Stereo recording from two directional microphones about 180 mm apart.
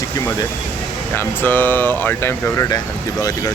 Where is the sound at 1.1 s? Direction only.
10° left (ahead or behind).